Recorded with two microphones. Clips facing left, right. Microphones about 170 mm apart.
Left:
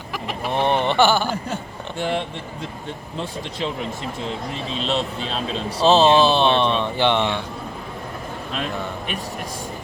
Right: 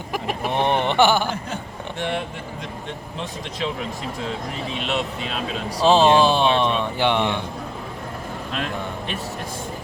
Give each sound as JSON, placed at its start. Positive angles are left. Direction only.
{"t": 0.6, "sound": "speech", "side_deg": -15}
{"t": 2.0, "sound": "speech", "side_deg": 30}
{"t": 4.8, "sound": "speech", "side_deg": 30}
{"t": 5.8, "sound": "speech", "side_deg": -15}